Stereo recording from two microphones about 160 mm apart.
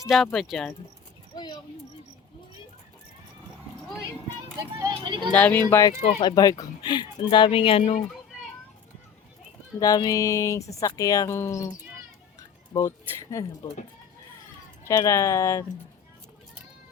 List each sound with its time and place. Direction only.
0.1 s speech: centre (ahead or behind)
4.8 s speech: 30° right (ahead or behind)
5.3 s speech: 10° left (ahead or behind)
6.0 s speech: 40° left (ahead or behind)
6.2 s speech: 25° left (ahead or behind)
9.8 s speech: 25° left (ahead or behind)
13.3 s speech: 20° left (ahead or behind)
14.8 s speech: 20° left (ahead or behind)